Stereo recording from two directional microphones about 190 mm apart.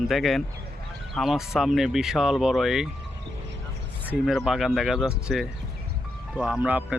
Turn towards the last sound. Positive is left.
turn(degrees=-10)  # may be behind; listen again after turning